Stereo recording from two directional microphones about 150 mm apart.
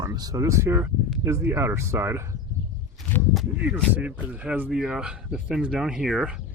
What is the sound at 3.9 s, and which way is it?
Speech, 10° right (ahead or behind).